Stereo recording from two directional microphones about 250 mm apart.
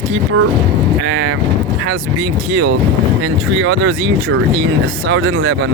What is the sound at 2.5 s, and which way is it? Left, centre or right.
Speech, right.